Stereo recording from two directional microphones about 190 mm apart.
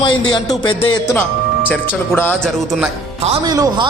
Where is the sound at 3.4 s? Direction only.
20° right (ahead or behind).